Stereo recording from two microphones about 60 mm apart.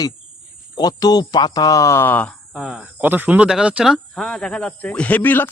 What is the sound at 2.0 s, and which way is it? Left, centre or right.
Speech, left.